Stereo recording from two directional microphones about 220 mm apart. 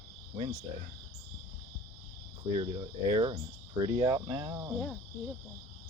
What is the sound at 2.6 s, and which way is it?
Speech, 20° right (ahead or behind).